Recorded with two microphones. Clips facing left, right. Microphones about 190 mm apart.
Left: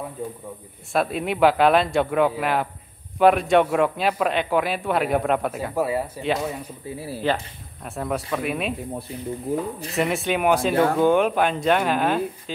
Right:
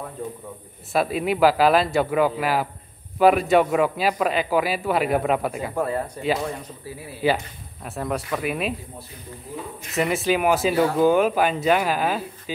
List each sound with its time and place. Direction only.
0.9 s speech: centre (ahead or behind)
6.9 s speech: 30° left (ahead or behind)
7.8 s speech: centre (ahead or behind)
9.5 s speech: 50° left (ahead or behind)
9.9 s speech: centre (ahead or behind)